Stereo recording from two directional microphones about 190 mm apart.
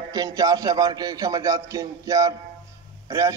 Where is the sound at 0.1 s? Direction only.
20° right (ahead or behind).